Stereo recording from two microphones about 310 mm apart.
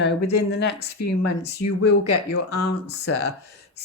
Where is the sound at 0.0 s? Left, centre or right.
Left.